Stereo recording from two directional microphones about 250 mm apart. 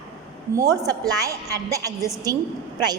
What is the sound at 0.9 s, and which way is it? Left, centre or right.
A woman's voice, centre.